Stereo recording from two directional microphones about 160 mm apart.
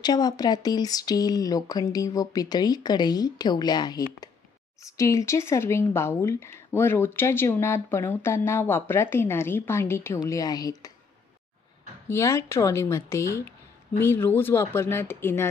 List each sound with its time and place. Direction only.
0.0 s speech: 25° left (ahead or behind)
12.1 s speech: 20° left (ahead or behind)